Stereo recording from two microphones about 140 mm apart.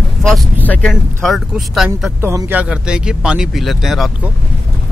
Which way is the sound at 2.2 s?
20° right (ahead or behind).